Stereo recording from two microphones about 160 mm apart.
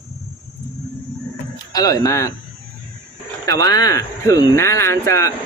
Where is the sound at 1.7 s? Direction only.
25° left (ahead or behind).